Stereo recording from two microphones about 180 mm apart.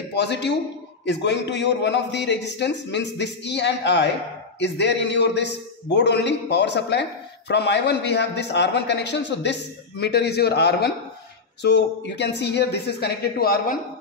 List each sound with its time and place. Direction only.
0.1 s a man's voice: 70° left (ahead or behind)